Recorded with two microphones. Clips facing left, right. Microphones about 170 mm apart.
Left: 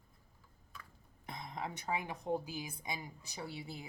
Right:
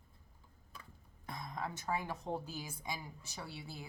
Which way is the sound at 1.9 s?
15° left (ahead or behind).